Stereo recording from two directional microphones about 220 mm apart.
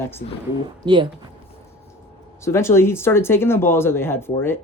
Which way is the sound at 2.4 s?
10° left (ahead or behind).